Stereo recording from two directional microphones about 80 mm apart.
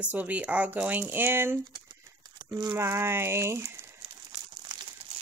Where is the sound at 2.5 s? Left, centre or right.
Right.